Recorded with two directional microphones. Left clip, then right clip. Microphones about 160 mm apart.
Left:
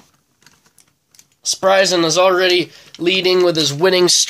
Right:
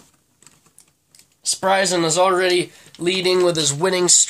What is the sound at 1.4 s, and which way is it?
Speech, 40° left (ahead or behind).